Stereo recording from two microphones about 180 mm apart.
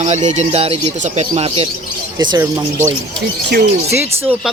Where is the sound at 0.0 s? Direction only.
40° right (ahead or behind).